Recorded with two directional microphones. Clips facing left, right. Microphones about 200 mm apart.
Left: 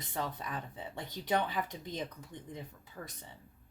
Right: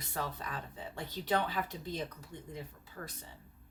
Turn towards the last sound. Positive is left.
turn(degrees=10)  # may be behind; listen again after turning